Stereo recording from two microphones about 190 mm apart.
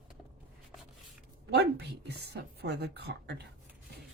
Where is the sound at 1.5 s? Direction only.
60° right (ahead or behind).